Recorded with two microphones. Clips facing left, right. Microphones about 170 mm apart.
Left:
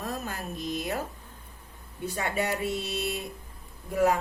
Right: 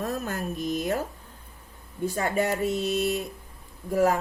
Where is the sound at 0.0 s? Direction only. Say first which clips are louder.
Right 5 dB; 50° right (ahead or behind).